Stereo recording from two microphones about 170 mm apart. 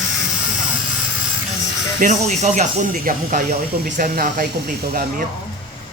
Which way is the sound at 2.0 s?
45° right (ahead or behind).